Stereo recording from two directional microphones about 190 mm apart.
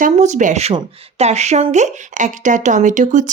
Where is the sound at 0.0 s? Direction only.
40° right (ahead or behind).